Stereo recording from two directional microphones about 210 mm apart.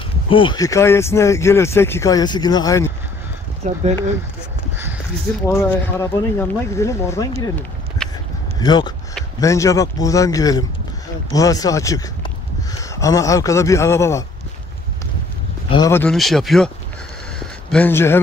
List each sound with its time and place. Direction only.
0.3 s speech: 25° left (ahead or behind)
3.6 s speech: 35° right (ahead or behind)
5.5 s speech: 10° left (ahead or behind)
8.5 s speech: 20° left (ahead or behind)
15.7 s speech: 15° left (ahead or behind)